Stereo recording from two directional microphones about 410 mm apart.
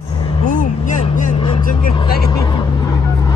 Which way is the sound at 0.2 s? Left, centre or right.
Centre.